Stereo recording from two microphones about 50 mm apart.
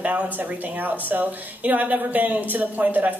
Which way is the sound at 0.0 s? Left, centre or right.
Right.